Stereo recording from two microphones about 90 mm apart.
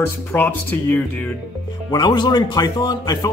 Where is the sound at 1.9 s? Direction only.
50° left (ahead or behind).